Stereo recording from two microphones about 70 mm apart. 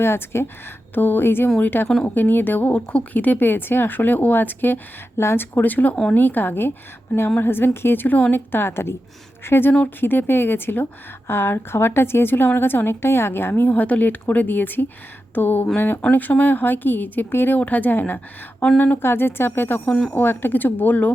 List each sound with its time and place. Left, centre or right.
0.0 s a woman's voice: left
5.1 s a woman's voice: left